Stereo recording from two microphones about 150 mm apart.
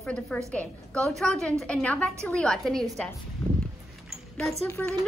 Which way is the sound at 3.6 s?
5° left (ahead or behind).